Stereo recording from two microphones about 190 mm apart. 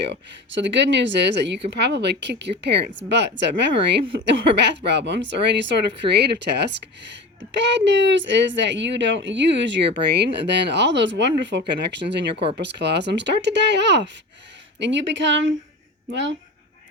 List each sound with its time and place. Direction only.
0.0 s a woman's voice: 65° right (ahead or behind)